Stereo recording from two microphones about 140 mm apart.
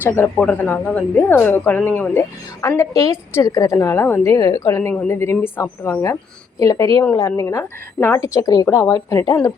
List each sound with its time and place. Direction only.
0.0 s a woman's voice: 15° left (ahead or behind)